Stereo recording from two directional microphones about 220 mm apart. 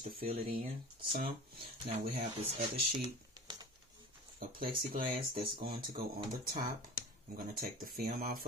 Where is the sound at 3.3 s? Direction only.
20° right (ahead or behind).